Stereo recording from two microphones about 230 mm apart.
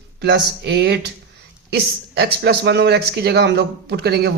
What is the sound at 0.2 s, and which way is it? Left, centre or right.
A man's voice, right.